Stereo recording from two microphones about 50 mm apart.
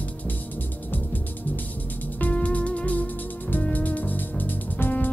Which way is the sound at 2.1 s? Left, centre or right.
Left.